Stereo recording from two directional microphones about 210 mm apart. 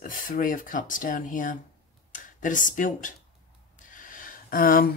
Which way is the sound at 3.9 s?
40° left (ahead or behind).